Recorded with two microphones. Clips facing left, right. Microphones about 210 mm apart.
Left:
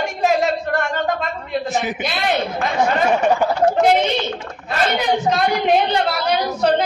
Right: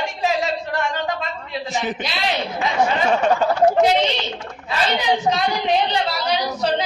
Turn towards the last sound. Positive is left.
turn(degrees=55)  # may be behind; listen again after turning